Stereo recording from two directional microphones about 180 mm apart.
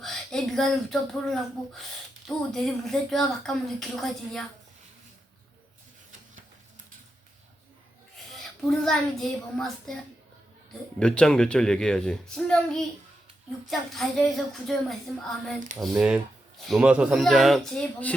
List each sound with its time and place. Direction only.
0.0 s speech: centre (ahead or behind)
8.8 s speech: centre (ahead or behind)
11.0 s speech: 5° left (ahead or behind)